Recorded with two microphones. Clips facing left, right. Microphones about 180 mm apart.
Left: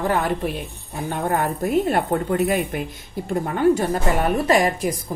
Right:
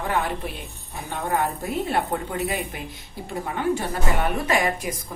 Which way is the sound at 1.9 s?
50° left (ahead or behind).